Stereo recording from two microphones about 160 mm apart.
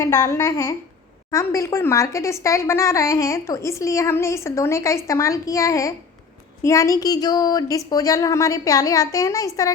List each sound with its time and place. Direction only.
0.0 s a woman's voice: 20° left (ahead or behind)